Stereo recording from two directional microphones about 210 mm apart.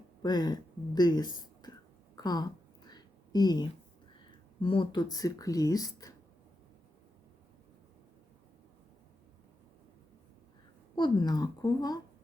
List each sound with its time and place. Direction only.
0.2 s speech: 20° left (ahead or behind)
2.1 s a sound: 20° left (ahead or behind)
4.3 s speech: 25° left (ahead or behind)
10.9 s a woman's voice: 20° left (ahead or behind)